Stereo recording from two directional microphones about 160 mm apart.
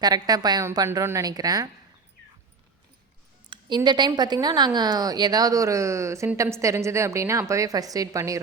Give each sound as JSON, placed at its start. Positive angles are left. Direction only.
{"t": 0.0, "sound": "a woman's voice", "side_deg": -25}
{"t": 3.5, "sound": "a woman's voice", "side_deg": -30}